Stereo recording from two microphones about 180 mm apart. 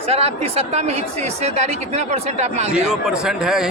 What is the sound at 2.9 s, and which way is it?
Speech, 5° right (ahead or behind).